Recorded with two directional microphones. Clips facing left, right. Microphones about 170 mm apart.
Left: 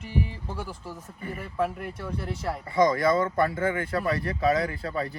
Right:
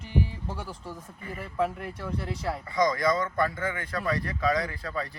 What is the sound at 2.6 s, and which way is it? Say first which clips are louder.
Speech: left 4 dB; 30° left (ahead or behind).